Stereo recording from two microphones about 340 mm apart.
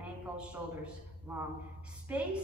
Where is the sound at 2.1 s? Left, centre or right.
Centre.